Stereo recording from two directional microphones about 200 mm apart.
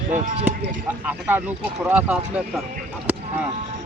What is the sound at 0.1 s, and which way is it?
Speech, 35° right (ahead or behind).